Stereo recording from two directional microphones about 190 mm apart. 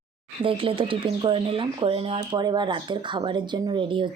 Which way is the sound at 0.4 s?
30° right (ahead or behind).